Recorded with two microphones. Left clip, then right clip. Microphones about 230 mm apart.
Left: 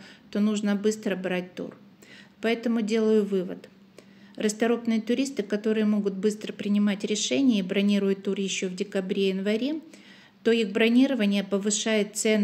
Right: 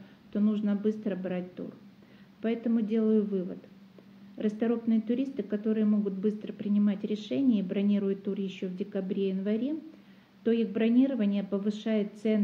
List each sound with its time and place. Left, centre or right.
0.3 s speech: left